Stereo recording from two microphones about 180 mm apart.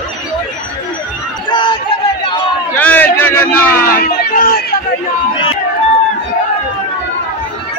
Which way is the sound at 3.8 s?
55° left (ahead or behind).